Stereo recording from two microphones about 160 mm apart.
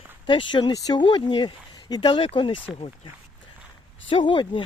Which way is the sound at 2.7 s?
5° right (ahead or behind).